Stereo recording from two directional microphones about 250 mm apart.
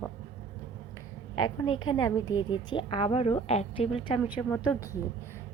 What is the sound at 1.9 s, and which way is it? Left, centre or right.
A woman's voice, centre.